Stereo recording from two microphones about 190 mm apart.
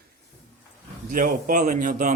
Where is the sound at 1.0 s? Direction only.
45° right (ahead or behind).